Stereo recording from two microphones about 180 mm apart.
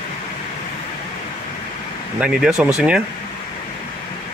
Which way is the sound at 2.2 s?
5° right (ahead or behind).